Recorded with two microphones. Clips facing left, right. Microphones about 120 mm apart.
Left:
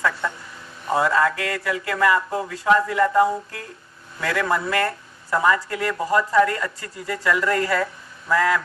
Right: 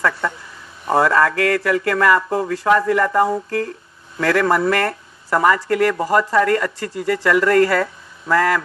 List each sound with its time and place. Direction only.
0.9 s speech: 65° right (ahead or behind)